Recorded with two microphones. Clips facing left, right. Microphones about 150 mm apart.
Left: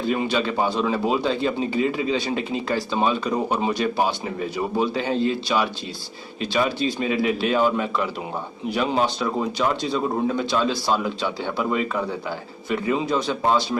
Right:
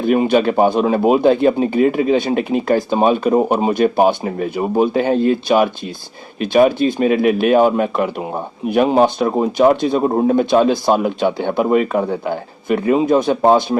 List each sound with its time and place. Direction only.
0.0 s speech: 55° right (ahead or behind)